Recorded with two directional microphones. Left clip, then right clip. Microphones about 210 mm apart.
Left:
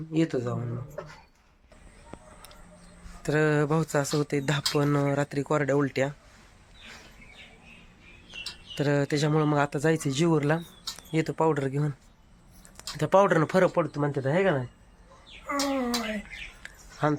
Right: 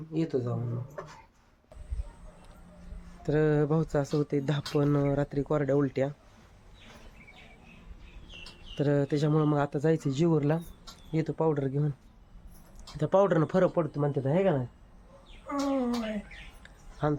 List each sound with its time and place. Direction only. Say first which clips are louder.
0.1 s speech: left 3 dB; 10° left (ahead or behind)
3.2 s speech: left 2 dB; 5° left (ahead or behind)
8.7 s speech: left 1 dB; centre (ahead or behind)
13.0 s speech: left 3 dB; 5° left (ahead or behind)
15.4 s a sound: left 2 dB; 5° right (ahead or behind)
16.6 s a sound: left 3 dB; 10° left (ahead or behind)